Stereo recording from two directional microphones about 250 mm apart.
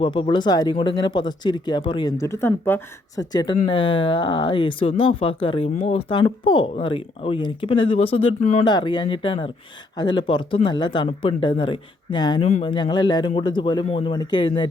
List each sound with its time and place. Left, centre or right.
0.0 s speech: left